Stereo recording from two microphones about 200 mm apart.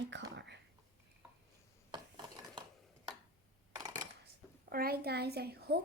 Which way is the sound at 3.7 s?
20° right (ahead or behind).